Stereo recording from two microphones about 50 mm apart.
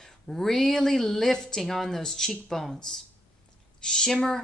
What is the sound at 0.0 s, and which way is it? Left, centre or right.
Speech, centre.